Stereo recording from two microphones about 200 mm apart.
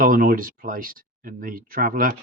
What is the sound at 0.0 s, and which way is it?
Speech, 45° right (ahead or behind).